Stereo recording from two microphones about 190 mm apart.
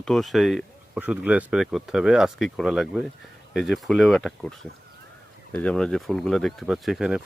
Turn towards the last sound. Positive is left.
turn(degrees=0)  # may be behind; listen again after turning